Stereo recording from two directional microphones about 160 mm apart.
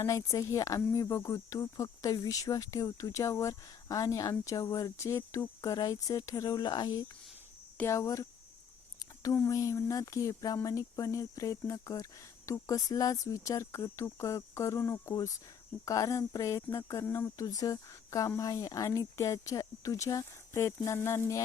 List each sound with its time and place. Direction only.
0.0 s speech: 20° left (ahead or behind)